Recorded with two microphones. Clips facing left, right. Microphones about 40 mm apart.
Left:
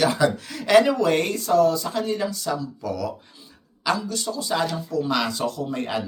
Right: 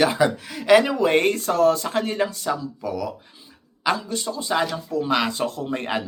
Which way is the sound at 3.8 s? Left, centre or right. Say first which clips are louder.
Right 1 dB; right.